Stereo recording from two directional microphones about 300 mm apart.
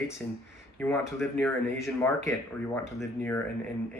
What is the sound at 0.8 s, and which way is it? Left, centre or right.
Speech, centre.